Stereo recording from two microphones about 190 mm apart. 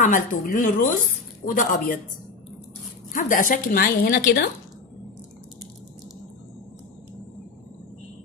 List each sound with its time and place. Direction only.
0.0 s a woman's voice: 45° left (ahead or behind)
3.1 s a woman's voice: 45° left (ahead or behind)